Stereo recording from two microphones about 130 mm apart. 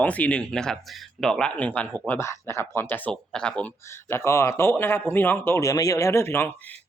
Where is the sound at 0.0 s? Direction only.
10° left (ahead or behind).